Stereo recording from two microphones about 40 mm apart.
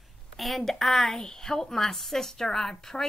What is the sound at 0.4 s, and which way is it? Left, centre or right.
A woman's voice, centre.